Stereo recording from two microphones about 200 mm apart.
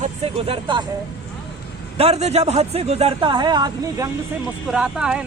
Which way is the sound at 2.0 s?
30° right (ahead or behind).